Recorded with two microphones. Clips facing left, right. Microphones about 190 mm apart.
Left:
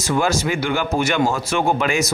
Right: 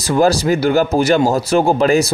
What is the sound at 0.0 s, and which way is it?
Speech, 35° right (ahead or behind).